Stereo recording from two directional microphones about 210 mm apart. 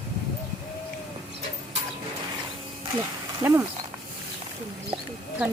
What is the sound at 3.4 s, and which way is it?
Speech, 10° right (ahead or behind).